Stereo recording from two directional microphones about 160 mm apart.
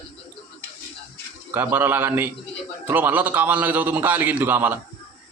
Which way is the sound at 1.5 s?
15° right (ahead or behind).